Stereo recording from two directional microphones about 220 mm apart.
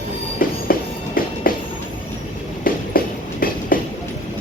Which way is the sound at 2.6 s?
40° left (ahead or behind).